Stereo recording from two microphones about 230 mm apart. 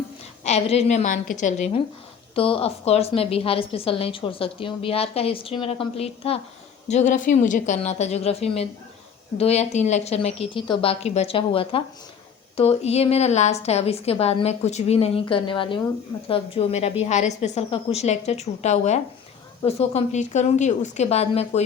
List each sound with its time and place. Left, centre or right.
0.4 s a woman's voice: left